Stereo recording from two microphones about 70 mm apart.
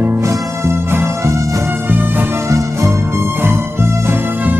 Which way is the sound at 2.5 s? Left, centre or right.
Right.